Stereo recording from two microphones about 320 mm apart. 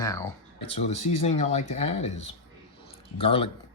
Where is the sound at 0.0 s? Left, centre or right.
Centre.